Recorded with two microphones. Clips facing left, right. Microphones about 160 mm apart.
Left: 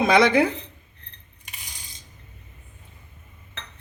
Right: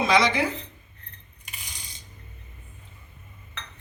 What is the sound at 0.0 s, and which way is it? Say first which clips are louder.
Speech: left 4 dB; 55° left (ahead or behind).